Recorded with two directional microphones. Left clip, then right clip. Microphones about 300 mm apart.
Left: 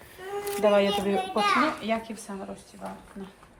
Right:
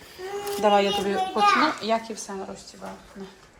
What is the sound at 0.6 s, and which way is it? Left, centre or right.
Speech, centre.